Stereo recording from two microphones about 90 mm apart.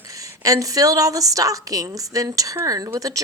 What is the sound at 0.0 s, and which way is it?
A woman's voice, 40° right (ahead or behind).